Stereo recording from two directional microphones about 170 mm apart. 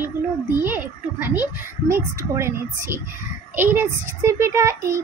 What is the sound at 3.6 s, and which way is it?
A child's voice, 15° right (ahead or behind).